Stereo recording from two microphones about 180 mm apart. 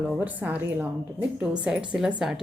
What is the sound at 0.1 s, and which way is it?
A woman's voice, 10° right (ahead or behind).